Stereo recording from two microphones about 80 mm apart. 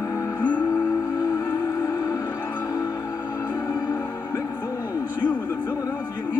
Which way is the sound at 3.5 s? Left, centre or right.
Left.